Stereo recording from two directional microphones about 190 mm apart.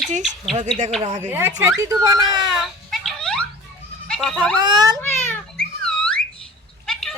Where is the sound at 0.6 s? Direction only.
40° right (ahead or behind).